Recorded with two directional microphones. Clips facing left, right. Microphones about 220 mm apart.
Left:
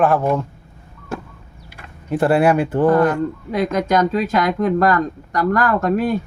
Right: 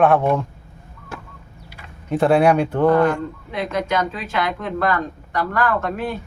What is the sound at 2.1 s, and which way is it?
Speech, 5° left (ahead or behind).